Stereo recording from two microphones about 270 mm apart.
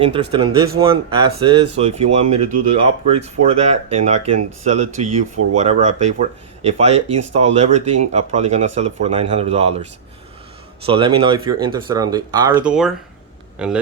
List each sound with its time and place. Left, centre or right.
0.0 s speech: centre
10.8 s speech: centre
12.6 s speech: centre